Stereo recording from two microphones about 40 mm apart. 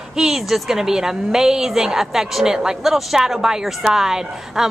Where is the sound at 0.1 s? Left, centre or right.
Centre.